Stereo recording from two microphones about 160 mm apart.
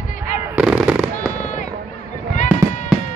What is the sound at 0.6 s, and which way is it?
Fireworks, 5° right (ahead or behind).